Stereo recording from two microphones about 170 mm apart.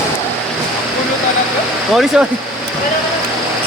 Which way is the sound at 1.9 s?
5° right (ahead or behind).